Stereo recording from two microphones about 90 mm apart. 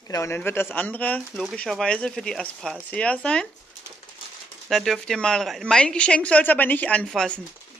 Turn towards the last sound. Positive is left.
turn(degrees=10)  # may be behind; listen again after turning